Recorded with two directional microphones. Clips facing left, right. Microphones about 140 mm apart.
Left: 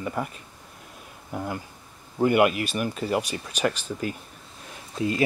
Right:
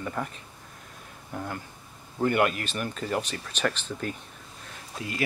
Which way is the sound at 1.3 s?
15° left (ahead or behind).